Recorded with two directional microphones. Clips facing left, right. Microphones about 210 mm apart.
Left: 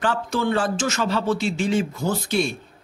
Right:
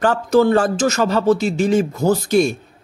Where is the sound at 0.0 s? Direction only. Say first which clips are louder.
Right 9 dB; 40° right (ahead or behind).